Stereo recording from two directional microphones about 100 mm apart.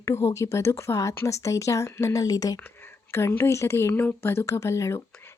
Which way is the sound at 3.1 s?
25° left (ahead or behind).